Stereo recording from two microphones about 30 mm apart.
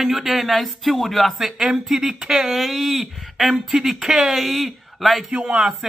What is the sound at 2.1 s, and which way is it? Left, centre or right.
Speech, right.